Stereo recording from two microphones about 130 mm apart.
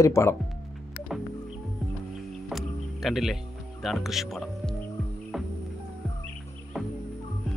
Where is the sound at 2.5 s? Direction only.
Centre (ahead or behind).